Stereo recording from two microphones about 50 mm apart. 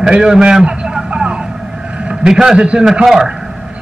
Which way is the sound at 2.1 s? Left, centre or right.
Centre.